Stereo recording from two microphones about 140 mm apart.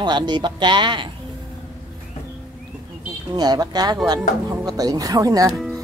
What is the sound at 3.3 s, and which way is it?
Speech, 30° right (ahead or behind).